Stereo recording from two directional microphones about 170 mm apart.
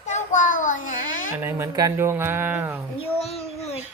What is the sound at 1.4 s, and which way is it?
Speech, 20° right (ahead or behind).